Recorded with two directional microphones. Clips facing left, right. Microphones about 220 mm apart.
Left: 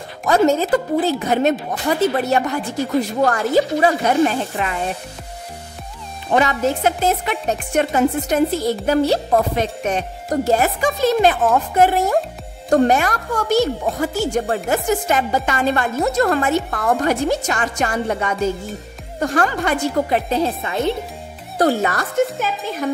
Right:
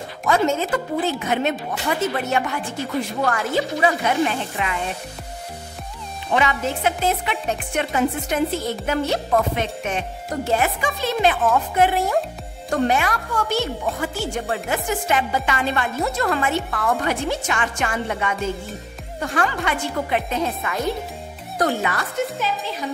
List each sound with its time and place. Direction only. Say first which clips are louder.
0.3 s speech: left 5 dB; 35° left (ahead or behind)
6.3 s speech: left 4 dB; 40° left (ahead or behind)